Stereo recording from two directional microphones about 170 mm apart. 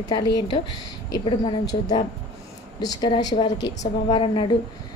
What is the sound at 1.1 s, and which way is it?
A woman's voice, 25° left (ahead or behind).